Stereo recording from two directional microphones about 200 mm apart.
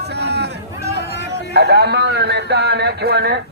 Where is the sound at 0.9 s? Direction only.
55° left (ahead or behind).